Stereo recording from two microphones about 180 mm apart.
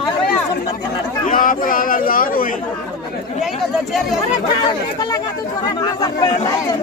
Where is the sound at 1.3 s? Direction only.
50° left (ahead or behind).